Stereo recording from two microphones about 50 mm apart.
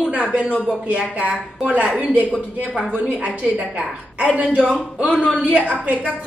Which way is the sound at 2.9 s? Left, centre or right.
Centre.